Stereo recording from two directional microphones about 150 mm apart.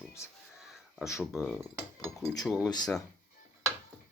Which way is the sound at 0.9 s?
Centre (ahead or behind).